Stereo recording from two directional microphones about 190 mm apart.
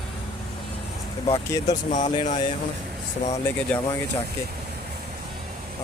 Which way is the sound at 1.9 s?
40° left (ahead or behind).